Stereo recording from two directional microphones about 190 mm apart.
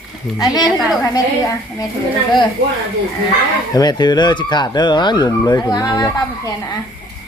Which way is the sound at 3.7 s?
20° left (ahead or behind).